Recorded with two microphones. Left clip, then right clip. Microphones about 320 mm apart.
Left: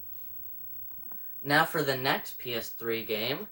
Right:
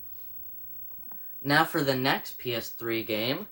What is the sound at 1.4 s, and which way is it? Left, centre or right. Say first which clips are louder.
Speech: right 1 dB; right.